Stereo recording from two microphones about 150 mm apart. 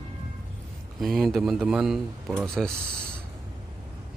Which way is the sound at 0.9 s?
Centre (ahead or behind).